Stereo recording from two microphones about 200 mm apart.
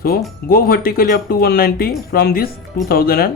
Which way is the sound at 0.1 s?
45° left (ahead or behind).